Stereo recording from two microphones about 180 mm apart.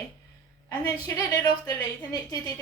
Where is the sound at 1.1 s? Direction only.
20° left (ahead or behind).